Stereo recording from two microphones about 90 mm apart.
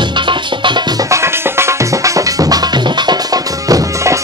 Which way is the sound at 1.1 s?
30° right (ahead or behind).